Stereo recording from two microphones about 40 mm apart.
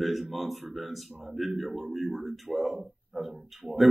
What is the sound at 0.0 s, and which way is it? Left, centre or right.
A man's voice, centre.